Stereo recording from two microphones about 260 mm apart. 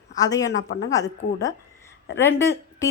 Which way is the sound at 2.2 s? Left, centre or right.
Centre.